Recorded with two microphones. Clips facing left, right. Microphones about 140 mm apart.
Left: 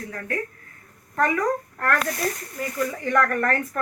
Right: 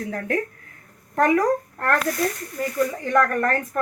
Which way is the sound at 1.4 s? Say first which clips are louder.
Right 3 dB; 25° right (ahead or behind).